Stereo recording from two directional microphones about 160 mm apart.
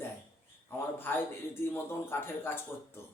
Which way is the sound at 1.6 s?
15° left (ahead or behind).